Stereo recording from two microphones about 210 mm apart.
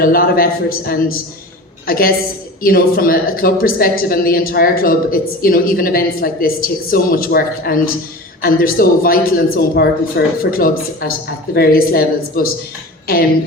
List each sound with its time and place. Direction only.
0.0 s speech: 45° left (ahead or behind)